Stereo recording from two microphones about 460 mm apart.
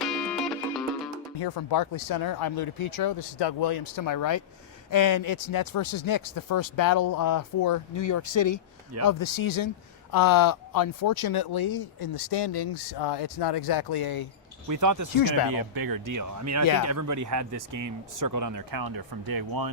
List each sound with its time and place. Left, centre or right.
0.0 s music: centre
1.4 s speech: left
12.3 s speech: left
14.7 s speech: right
15.1 s speech: left
15.5 s speech: right